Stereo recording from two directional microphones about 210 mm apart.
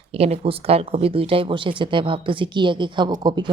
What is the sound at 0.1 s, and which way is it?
A woman's voice, 30° right (ahead or behind).